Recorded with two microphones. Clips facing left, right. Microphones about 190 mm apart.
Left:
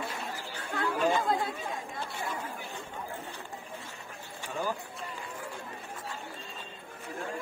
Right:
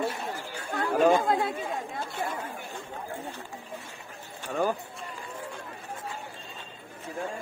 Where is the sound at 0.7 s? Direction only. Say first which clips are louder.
Right 6 dB; 50° right (ahead or behind).